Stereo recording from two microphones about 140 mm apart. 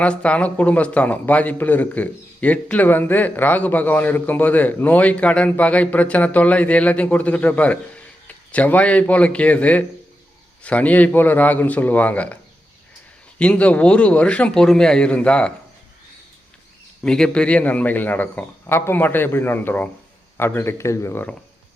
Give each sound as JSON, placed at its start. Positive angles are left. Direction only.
{"t": 0.0, "sound": "a man's voice", "side_deg": 10}
{"t": 13.4, "sound": "a man's voice", "side_deg": 10}
{"t": 17.0, "sound": "a man's voice", "side_deg": 5}